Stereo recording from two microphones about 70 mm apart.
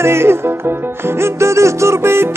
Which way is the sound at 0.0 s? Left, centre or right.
Right.